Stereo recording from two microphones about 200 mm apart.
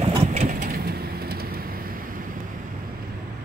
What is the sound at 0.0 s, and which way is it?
Vehicle, 30° right (ahead or behind).